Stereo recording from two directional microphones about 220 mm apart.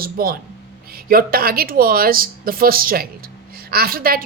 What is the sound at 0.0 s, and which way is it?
Speech, 40° right (ahead or behind).